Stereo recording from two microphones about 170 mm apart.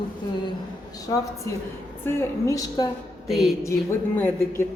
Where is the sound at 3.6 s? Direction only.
15° left (ahead or behind).